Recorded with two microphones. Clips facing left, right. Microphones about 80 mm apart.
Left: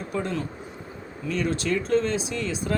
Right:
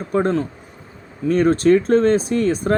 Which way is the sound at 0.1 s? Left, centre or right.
Right.